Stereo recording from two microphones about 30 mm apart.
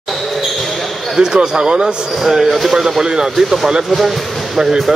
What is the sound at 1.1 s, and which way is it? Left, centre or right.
Speech, right.